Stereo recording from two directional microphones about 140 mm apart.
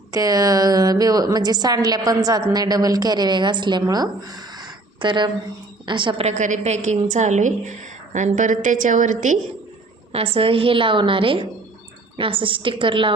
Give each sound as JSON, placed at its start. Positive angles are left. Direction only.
{"t": 0.1, "sound": "a woman's voice", "side_deg": -25}
{"t": 4.5, "sound": "a sound", "side_deg": -35}
{"t": 5.8, "sound": "a woman's voice", "side_deg": -35}
{"t": 6.3, "sound": "a woman's voice", "side_deg": -60}
{"t": 10.1, "sound": "a woman's voice", "side_deg": -45}